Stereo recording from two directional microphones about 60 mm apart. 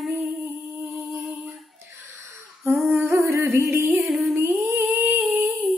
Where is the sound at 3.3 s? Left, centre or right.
Right.